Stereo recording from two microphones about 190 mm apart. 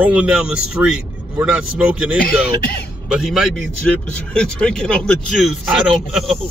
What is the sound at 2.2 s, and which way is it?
Speech, 55° left (ahead or behind).